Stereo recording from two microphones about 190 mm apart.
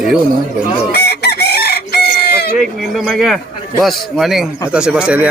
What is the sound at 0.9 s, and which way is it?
Chicken, 60° left (ahead or behind).